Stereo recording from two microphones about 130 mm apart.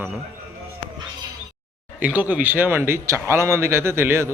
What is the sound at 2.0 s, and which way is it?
Speech, 10° right (ahead or behind).